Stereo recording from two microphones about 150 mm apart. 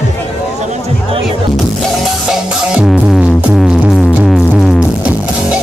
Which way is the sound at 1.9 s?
Centre (ahead or behind).